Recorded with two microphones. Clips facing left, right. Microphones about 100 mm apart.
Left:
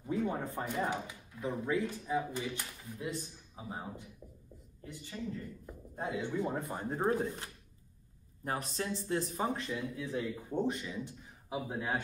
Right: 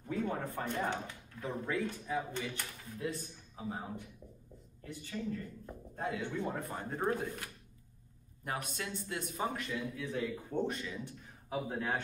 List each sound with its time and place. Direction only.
0.0 s chopping: 15° left (ahead or behind)
0.7 s speech: 5° left (ahead or behind)
4.8 s speech: 15° left (ahead or behind)
6.5 s speech: 25° left (ahead or behind)
8.5 s a man's voice: 35° left (ahead or behind); by 12.0 s 15° left (ahead or behind)